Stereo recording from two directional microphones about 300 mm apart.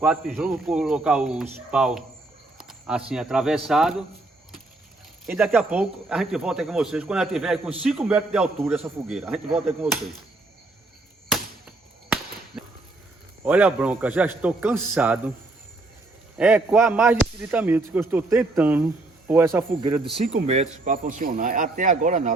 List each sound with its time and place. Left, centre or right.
0.0 s speech: centre
5.2 s speech: centre
12.0 s a sound: centre
13.4 s speech: centre
16.4 s speech: centre; by 22.3 s right